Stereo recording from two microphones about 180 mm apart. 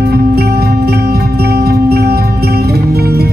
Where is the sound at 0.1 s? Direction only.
60° right (ahead or behind).